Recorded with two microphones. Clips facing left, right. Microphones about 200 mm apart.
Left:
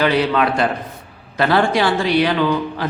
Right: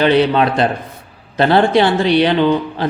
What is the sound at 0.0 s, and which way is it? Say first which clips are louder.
A man's voice: right 4 dB; 25° right (ahead or behind).